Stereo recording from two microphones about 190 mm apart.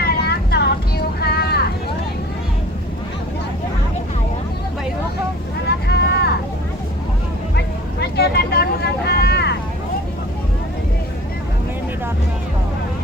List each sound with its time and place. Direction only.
0.0 s vehicle: 55° left (ahead or behind)
5.9 s vehicle: 60° left (ahead or behind)
7.5 s vehicle: 60° left (ahead or behind)